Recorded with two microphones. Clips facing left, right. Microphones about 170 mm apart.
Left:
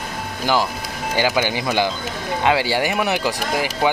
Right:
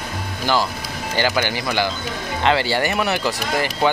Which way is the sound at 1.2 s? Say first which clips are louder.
Left 1 dB; 10° left (ahead or behind).